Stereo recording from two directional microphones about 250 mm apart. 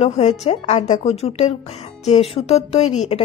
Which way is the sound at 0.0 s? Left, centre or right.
Left.